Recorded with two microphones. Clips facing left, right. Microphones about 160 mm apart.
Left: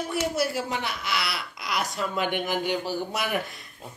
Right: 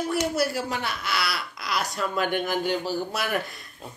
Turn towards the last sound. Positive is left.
turn(degrees=20)  # may be behind; listen again after turning